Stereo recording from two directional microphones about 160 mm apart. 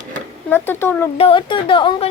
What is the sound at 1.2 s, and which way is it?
Speech, 30° left (ahead or behind).